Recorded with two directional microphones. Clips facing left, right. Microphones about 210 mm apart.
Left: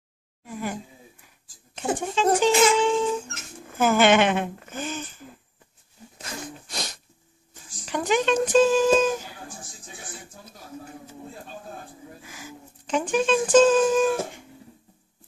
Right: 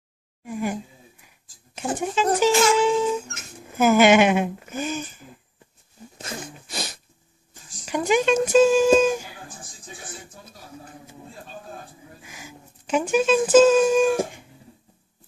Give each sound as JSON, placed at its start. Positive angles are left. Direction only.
{"t": 0.5, "sound": "speech", "side_deg": -15}
{"t": 1.8, "sound": "speech", "side_deg": -5}
{"t": 6.7, "sound": "sneeze", "side_deg": -5}
{"t": 7.8, "sound": "speech", "side_deg": -10}
{"t": 12.2, "sound": "speech", "side_deg": -15}